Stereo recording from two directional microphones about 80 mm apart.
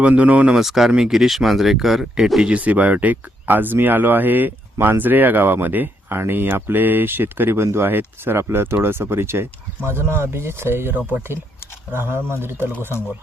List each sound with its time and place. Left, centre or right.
0.0 s speech: centre